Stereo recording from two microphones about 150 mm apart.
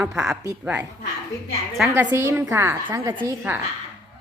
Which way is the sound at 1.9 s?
15° right (ahead or behind).